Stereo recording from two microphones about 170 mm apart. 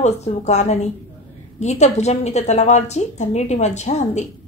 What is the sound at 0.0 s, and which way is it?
Speech, 40° left (ahead or behind).